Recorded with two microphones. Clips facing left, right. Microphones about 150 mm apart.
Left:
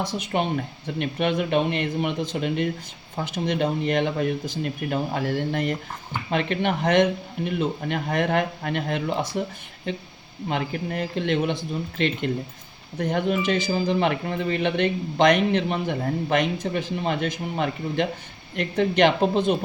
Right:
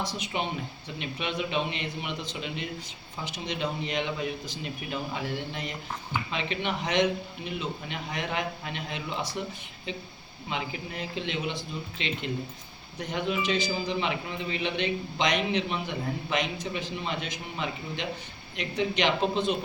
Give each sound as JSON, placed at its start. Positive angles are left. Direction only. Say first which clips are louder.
{"t": 0.2, "sound": "a man's voice", "louder": "left 7 dB", "side_deg": 55}